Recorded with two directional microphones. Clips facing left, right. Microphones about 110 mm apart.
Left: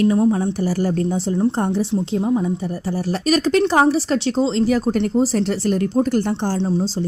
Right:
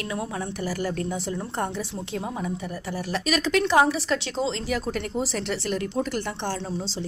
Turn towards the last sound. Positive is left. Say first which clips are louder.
# left 9 dB
turn(degrees=40)  # may be behind; listen again after turning